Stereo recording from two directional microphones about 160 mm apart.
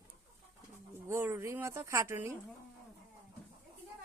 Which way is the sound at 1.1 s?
15° right (ahead or behind).